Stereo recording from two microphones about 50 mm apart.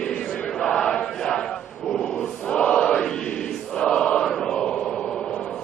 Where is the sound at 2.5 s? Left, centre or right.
Centre.